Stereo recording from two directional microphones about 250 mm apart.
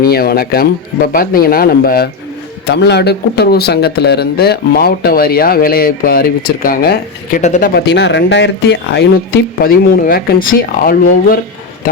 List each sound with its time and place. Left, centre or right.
0.0 s speech: left